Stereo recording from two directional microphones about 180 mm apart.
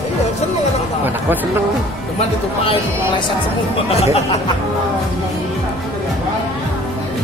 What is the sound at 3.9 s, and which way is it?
Speech, 35° left (ahead or behind).